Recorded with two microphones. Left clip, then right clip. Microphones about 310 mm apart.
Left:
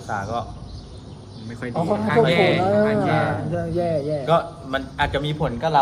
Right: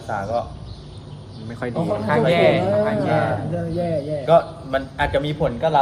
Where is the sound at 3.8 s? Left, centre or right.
Centre.